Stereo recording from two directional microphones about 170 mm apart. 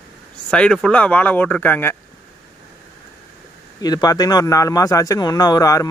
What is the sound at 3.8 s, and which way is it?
A man's voice, 20° left (ahead or behind).